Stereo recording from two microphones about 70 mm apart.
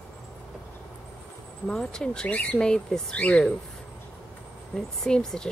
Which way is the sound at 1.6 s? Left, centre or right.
Centre.